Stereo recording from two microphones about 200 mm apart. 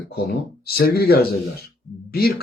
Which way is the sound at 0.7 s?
50° left (ahead or behind).